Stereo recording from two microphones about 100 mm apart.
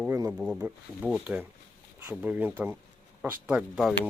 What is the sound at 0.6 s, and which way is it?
Speech, 15° right (ahead or behind).